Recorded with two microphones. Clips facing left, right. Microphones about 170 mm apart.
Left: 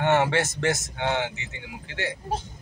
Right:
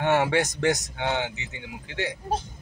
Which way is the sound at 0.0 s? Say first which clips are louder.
Even; 10° right (ahead or behind).